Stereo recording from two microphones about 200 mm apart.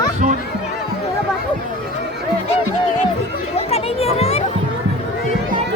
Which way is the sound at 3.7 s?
30° left (ahead or behind).